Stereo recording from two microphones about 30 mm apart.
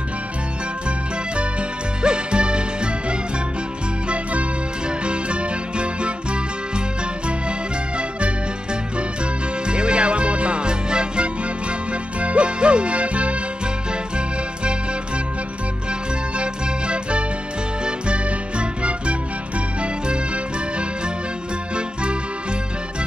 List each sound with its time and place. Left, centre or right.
2.0 s music: right
4.1 s music: right
5.0 s music: right
9.7 s music: right
12.2 s music: right
16.3 s music: right